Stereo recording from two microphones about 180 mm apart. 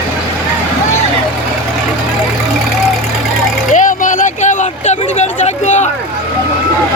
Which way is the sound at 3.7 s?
45° left (ahead or behind).